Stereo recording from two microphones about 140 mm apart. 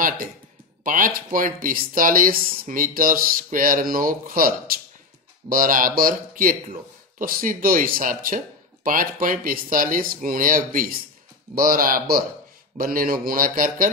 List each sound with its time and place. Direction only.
0.8 s speech: 75° right (ahead or behind)